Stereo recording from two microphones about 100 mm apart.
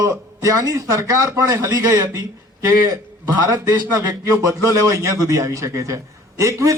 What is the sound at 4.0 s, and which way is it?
A man's voice, 35° right (ahead or behind).